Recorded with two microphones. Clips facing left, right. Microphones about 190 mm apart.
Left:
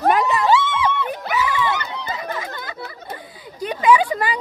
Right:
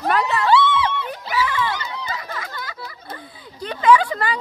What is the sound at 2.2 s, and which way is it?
Chatter, 25° left (ahead or behind).